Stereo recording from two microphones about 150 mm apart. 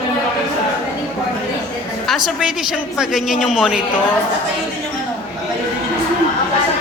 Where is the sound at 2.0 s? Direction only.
Centre (ahead or behind).